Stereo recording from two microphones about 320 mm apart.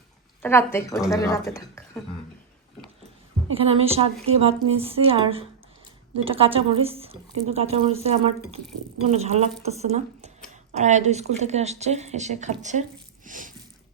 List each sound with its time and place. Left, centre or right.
0.4 s speech: centre
3.5 s a woman's voice: centre
13.2 s a sound: right